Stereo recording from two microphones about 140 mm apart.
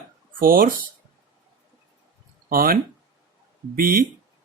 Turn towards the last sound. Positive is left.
turn(degrees=-90)